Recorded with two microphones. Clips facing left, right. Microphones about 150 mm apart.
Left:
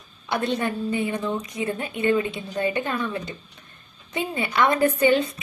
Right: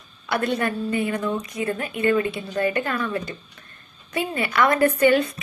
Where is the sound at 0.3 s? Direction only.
15° left (ahead or behind).